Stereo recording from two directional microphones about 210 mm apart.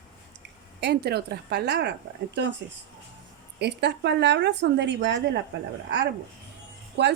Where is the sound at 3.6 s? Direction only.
55° right (ahead or behind).